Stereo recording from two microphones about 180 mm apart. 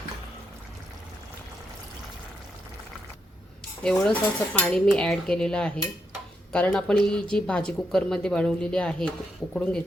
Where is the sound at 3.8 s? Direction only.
5° left (ahead or behind).